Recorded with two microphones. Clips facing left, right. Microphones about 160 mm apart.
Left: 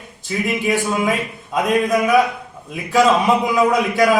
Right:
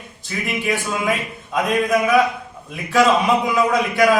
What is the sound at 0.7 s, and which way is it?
Speech, 20° left (ahead or behind).